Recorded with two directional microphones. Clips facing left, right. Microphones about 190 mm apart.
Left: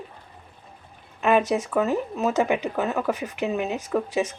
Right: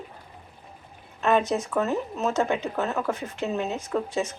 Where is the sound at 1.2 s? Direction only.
10° left (ahead or behind).